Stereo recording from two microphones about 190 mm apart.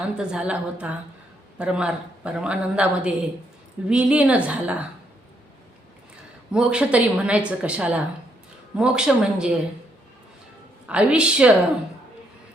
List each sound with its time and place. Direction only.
0.2 s a woman's voice: 5° right (ahead or behind)
6.5 s speech: 5° right (ahead or behind)
10.8 s speech: 5° right (ahead or behind)